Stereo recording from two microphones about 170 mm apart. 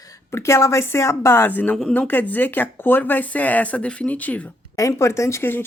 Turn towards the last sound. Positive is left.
turn(degrees=15)  # may be behind; listen again after turning